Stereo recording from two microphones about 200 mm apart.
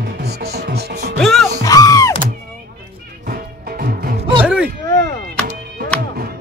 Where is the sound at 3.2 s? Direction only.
50° right (ahead or behind).